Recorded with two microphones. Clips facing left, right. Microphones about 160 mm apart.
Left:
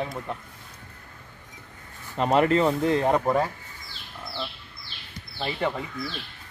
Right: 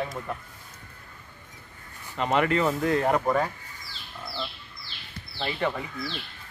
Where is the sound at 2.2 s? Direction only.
35° left (ahead or behind).